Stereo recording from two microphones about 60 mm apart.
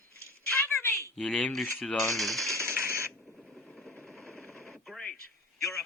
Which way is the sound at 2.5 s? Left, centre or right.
Right.